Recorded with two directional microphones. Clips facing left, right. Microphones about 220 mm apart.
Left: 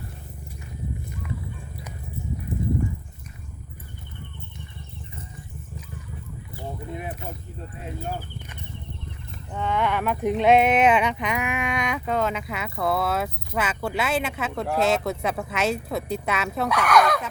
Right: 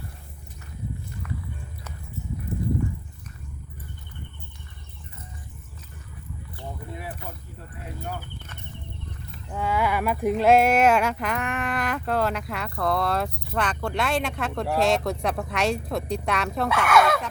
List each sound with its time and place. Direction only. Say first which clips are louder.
2.5 s horse: left 1 dB; 15° left (ahead or behind)
6.9 s vehicle: left 3 dB; 20° left (ahead or behind)
9.5 s speech: even; 5° right (ahead or behind)